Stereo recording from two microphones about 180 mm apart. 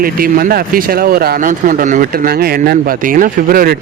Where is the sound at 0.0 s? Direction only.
55° right (ahead or behind).